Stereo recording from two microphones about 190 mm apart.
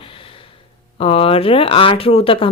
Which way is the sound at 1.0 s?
30° left (ahead or behind).